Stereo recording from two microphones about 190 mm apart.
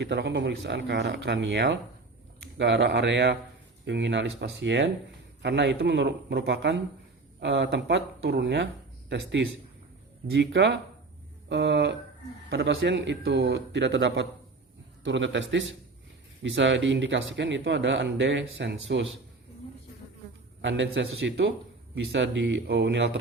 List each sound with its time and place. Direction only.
0.0 s speech: 60° right (ahead or behind)
20.6 s speech: 70° right (ahead or behind)